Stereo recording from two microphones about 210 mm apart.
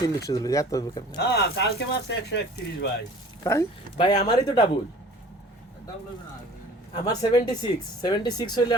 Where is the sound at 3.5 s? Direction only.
15° left (ahead or behind).